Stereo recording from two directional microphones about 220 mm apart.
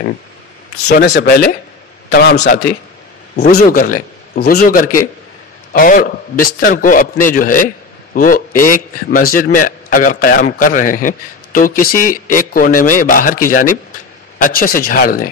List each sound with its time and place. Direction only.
0.8 s a man's voice: 50° left (ahead or behind)